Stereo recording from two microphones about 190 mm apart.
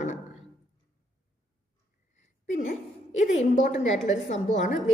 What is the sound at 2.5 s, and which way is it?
A woman's voice, 40° left (ahead or behind).